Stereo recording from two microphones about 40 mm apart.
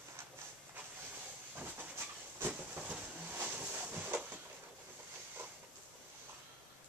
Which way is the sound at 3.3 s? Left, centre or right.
Right.